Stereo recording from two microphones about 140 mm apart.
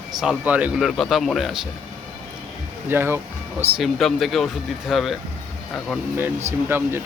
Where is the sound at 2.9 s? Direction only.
15° right (ahead or behind).